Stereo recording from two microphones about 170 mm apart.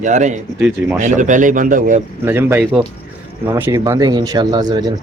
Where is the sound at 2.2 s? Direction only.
15° right (ahead or behind).